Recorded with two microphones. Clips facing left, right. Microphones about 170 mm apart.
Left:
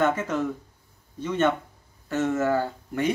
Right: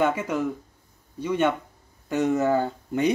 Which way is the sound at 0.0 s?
10° right (ahead or behind).